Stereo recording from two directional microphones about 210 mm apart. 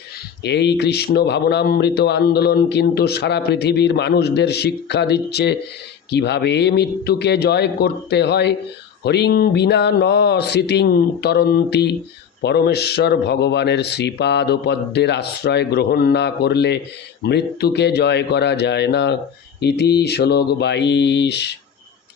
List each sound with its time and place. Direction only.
0.4 s a man's voice: 55° left (ahead or behind)